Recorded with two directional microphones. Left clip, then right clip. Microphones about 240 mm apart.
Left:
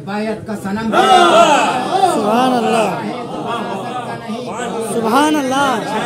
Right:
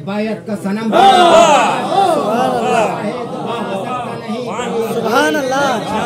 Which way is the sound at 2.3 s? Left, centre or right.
Left.